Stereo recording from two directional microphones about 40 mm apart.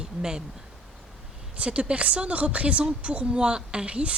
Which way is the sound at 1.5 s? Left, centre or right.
Right.